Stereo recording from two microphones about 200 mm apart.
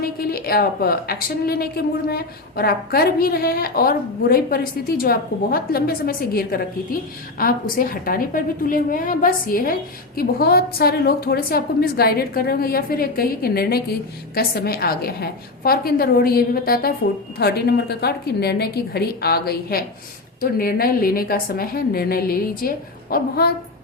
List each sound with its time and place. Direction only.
0.0 s a woman's voice: 50° left (ahead or behind)